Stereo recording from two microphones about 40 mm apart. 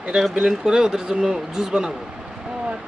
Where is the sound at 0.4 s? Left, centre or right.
Centre.